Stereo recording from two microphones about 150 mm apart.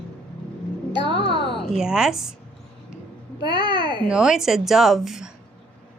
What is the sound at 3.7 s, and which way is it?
Speech, 30° left (ahead or behind).